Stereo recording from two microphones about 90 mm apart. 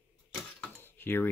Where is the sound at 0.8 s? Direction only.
25° left (ahead or behind).